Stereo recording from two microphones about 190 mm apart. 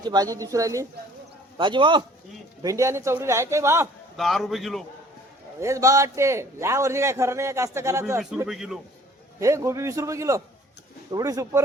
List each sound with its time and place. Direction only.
0.0 s a man's voice: 20° right (ahead or behind)
4.2 s a man's voice: centre (ahead or behind)
5.5 s a man's voice: 15° right (ahead or behind)
8.4 s a man's voice: centre (ahead or behind)
9.4 s a man's voice: 15° right (ahead or behind)